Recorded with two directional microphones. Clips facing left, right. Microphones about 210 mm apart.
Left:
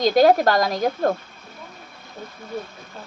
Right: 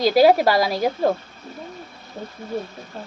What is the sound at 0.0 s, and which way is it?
Speech, 5° right (ahead or behind).